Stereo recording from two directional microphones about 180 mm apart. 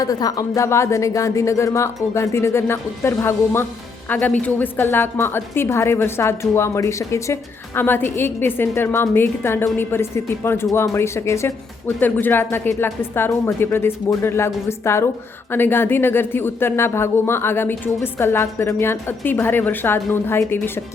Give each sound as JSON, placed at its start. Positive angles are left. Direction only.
{"t": 0.0, "sound": "speech", "side_deg": 20}